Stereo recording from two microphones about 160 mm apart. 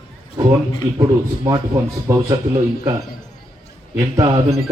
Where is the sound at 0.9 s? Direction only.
20° right (ahead or behind).